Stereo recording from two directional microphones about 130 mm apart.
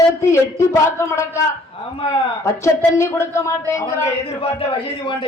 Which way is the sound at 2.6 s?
20° left (ahead or behind).